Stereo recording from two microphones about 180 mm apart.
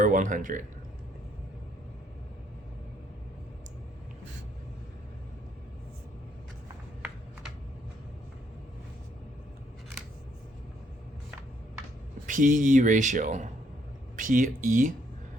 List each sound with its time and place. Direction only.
0.0 s speech: 45° right (ahead or behind)
12.2 s speech: 45° right (ahead or behind)